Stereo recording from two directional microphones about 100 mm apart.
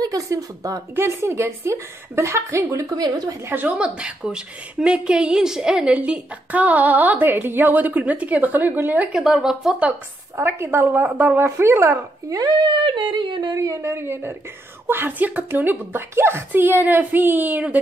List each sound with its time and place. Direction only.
0.0 s a woman's voice: 35° right (ahead or behind)
3.0 s a woman's voice: 45° right (ahead or behind)
3.4 s a woman's voice: 15° right (ahead or behind)
10.3 s a woman's voice: 25° right (ahead or behind); by 13.7 s 45° right (ahead or behind)
13.7 s a woman's voice: 25° right (ahead or behind)